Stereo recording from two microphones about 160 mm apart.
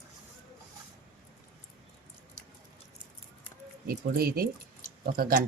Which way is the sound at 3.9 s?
70° right (ahead or behind).